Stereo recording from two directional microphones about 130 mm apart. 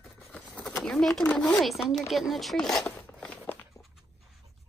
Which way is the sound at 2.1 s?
Centre (ahead or behind).